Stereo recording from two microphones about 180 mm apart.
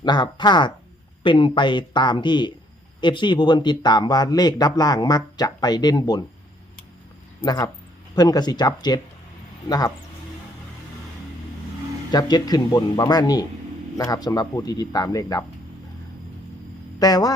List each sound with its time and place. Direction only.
0.0 s speech: 25° left (ahead or behind)
7.4 s speech: 20° left (ahead or behind)
12.1 s speech: 20° left (ahead or behind)
17.0 s speech: 20° left (ahead or behind)